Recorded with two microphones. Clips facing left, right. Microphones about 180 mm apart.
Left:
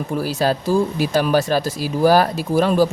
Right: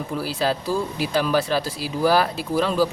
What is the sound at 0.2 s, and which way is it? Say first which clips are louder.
Speech: left 4 dB; 45° left (ahead or behind).